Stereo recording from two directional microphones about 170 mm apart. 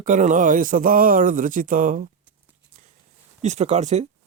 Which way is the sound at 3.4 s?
40° right (ahead or behind).